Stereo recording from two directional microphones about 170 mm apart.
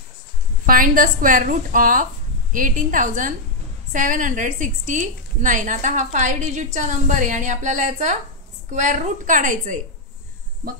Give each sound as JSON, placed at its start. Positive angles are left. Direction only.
{"t": 0.7, "sound": "a woman's voice", "side_deg": -55}